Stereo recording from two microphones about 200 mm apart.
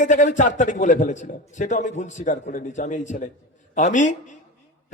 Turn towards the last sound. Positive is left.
turn(degrees=40)  # may be behind; listen again after turning